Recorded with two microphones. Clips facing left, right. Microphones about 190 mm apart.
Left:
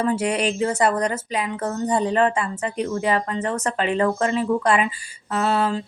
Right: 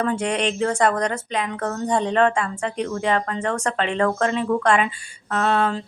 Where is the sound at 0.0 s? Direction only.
5° left (ahead or behind).